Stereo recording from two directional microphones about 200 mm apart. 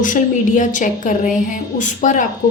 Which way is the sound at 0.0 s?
40° left (ahead or behind).